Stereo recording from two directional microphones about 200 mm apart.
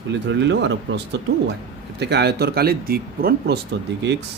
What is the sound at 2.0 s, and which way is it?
Speech, 55° right (ahead or behind).